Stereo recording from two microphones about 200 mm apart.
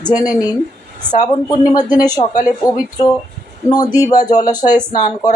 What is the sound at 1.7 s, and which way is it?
Speech, 20° left (ahead or behind).